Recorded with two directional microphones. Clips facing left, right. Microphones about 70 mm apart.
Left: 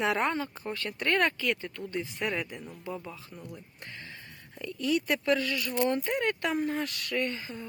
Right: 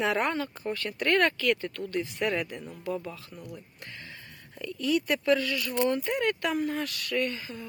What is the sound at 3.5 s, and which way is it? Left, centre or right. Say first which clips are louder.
Speech: right 1 dB; left.